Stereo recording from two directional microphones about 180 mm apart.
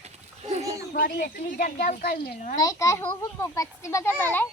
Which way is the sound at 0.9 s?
55° left (ahead or behind).